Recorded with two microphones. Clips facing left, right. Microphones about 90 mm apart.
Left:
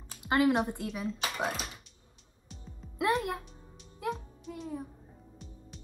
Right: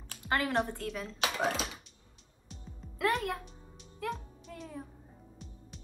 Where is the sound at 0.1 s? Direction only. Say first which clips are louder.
Left 6 dB; 15° left (ahead or behind).